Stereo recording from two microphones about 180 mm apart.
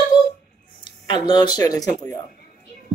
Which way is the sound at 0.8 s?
25° left (ahead or behind).